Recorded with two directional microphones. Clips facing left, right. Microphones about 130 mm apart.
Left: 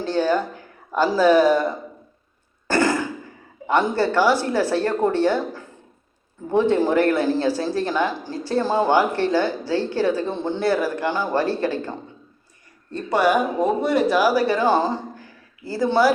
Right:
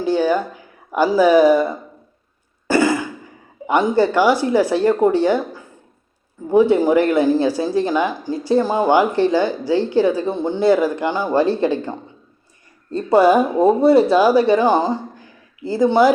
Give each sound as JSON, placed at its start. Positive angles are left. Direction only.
{"t": 0.0, "sound": "speech", "side_deg": -10}
{"t": 2.6, "sound": "a sound", "side_deg": -10}
{"t": 3.7, "sound": "speech", "side_deg": -15}